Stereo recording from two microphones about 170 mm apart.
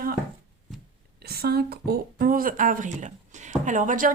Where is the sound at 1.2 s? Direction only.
70° right (ahead or behind); by 4.1 s 50° right (ahead or behind).